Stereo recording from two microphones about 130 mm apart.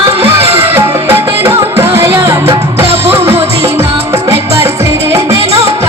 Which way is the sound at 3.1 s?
20° right (ahead or behind).